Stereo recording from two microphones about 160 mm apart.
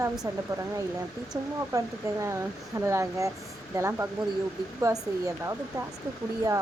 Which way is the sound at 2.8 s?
20° right (ahead or behind).